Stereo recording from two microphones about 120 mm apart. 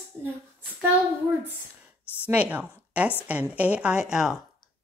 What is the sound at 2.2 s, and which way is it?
A woman's voice, 10° right (ahead or behind).